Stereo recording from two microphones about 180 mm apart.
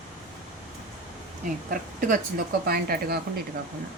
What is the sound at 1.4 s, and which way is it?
A woman's voice, 50° right (ahead or behind).